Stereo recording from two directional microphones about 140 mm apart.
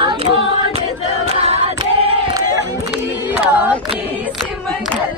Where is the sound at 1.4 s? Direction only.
45° right (ahead or behind).